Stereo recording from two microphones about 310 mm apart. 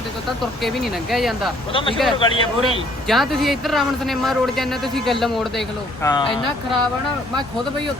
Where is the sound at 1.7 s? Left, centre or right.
Centre.